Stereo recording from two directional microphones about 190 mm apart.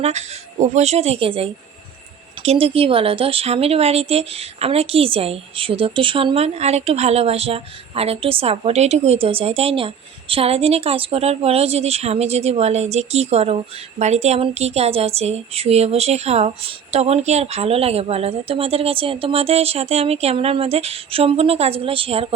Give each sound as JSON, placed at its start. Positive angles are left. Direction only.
{"t": 0.0, "sound": "speech", "side_deg": -35}